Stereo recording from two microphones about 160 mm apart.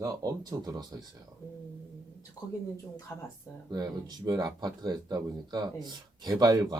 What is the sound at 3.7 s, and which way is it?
Speech, 25° right (ahead or behind).